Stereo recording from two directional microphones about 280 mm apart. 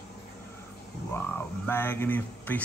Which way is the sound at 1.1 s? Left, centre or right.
Centre.